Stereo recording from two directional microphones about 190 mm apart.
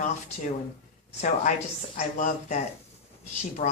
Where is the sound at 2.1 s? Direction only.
40° left (ahead or behind).